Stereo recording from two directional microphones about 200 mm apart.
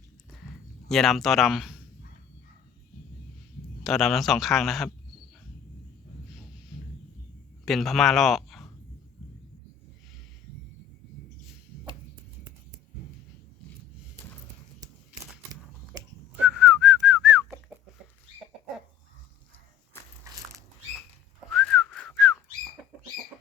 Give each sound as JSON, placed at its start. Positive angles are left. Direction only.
{"t": 0.9, "sound": "speech", "side_deg": 0}
{"t": 3.8, "sound": "speech", "side_deg": 0}
{"t": 7.6, "sound": "a man's voice", "side_deg": 0}
{"t": 16.5, "sound": "whistling", "side_deg": -5}
{"t": 20.3, "sound": "a sound", "side_deg": -15}
{"t": 21.5, "sound": "whistling", "side_deg": 0}